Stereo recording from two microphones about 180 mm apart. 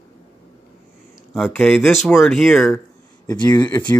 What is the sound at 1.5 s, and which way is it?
Speech, 5° left (ahead or behind).